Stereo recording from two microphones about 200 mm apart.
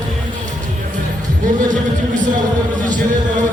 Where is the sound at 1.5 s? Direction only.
40° right (ahead or behind).